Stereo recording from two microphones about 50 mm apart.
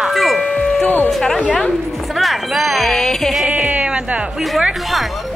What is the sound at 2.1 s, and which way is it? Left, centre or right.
Speech, centre.